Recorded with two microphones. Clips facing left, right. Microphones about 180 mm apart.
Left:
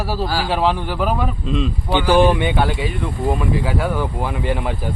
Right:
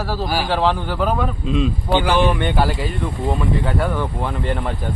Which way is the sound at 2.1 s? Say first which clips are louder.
Left 6 dB; 40° left (ahead or behind).